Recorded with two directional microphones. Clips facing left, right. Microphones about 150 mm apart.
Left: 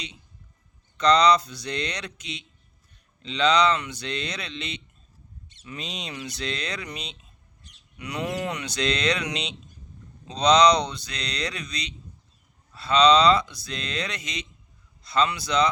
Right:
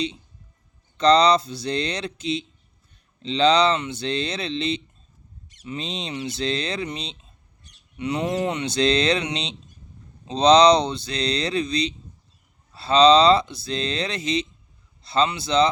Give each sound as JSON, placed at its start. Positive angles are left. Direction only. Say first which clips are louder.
{"t": 0.9, "sound": "speech", "louder": "right 2 dB", "side_deg": -30}